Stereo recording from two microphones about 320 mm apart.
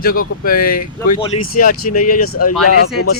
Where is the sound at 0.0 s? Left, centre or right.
Left.